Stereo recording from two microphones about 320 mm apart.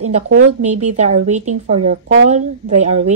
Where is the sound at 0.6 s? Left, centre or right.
Right.